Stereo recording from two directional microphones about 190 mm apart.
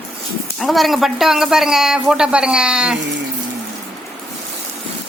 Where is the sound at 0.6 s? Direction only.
Centre (ahead or behind).